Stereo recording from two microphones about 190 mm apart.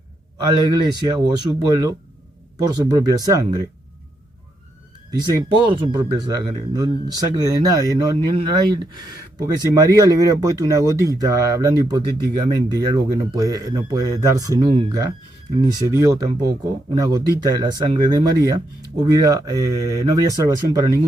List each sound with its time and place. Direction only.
0.4 s speech: 20° right (ahead or behind)
5.2 s speech: 25° right (ahead or behind)
14.7 s speech: 30° right (ahead or behind)
15.7 s speech: 15° right (ahead or behind)